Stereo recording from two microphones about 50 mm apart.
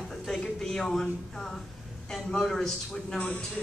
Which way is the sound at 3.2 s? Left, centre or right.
Left.